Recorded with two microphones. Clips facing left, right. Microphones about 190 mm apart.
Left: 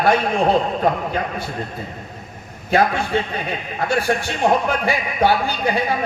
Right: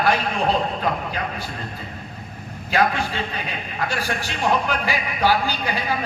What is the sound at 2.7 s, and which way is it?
A man's voice, 25° left (ahead or behind).